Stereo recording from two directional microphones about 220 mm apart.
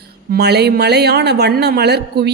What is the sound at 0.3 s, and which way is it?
A woman's voice, 45° right (ahead or behind).